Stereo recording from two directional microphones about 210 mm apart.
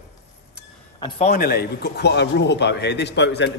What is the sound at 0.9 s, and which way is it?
Speech, 25° left (ahead or behind).